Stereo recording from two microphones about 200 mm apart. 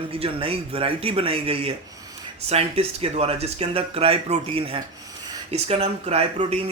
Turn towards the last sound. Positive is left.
turn(degrees=-30)  # may be behind; listen again after turning